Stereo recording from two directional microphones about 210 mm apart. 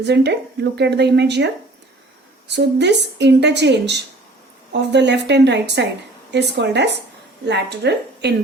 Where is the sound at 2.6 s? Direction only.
55° right (ahead or behind).